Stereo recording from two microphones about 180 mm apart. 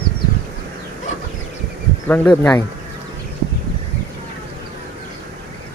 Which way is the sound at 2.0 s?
10° left (ahead or behind).